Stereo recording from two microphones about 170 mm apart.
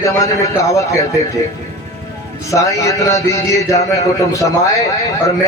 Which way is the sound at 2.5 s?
20° left (ahead or behind).